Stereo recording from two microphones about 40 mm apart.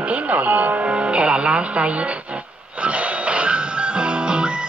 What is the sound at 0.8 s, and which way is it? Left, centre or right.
Speech, right.